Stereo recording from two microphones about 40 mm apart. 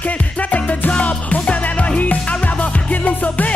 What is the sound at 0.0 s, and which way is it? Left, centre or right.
Music, left.